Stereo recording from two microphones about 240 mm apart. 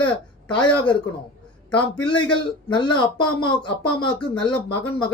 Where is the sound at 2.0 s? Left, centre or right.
Centre.